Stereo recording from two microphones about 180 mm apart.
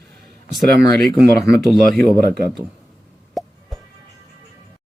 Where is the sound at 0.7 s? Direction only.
60° right (ahead or behind).